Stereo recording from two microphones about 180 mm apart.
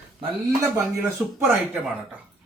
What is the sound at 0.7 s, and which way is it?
Speech, 15° right (ahead or behind).